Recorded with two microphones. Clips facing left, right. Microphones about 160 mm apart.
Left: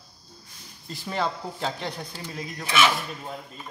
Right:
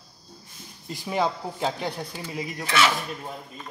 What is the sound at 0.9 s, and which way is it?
Speech, 15° right (ahead or behind).